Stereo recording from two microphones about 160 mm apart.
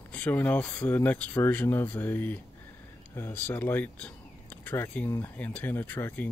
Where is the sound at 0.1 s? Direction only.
10° left (ahead or behind).